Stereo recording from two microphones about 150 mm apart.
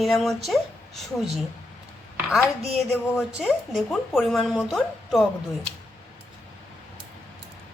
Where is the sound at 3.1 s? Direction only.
Centre (ahead or behind).